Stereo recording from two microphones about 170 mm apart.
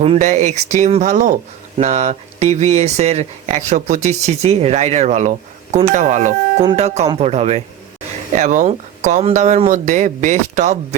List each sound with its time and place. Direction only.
0.0 s speech: 40° right (ahead or behind)